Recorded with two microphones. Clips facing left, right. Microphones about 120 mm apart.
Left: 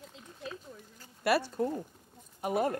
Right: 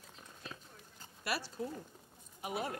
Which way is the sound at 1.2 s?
60° left (ahead or behind).